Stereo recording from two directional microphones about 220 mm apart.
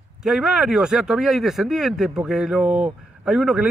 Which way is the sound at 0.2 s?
Centre (ahead or behind).